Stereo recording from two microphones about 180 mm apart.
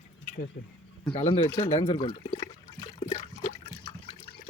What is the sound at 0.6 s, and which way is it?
Speech, 55° left (ahead or behind).